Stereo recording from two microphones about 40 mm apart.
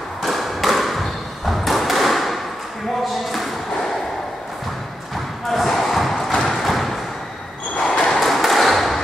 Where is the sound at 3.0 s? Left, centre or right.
Centre.